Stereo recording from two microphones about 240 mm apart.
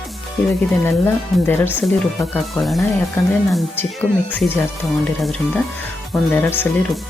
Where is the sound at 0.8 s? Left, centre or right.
Centre.